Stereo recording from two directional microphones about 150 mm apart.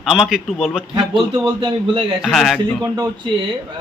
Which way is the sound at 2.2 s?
Centre (ahead or behind).